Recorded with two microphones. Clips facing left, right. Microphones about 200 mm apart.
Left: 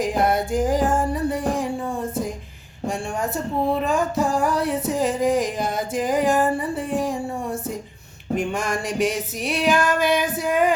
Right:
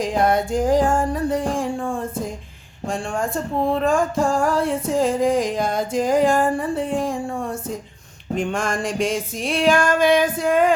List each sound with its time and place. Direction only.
0.0 s speech: 5° left (ahead or behind)
2.8 s speech: centre (ahead or behind)
10.0 s female singing: 50° right (ahead or behind)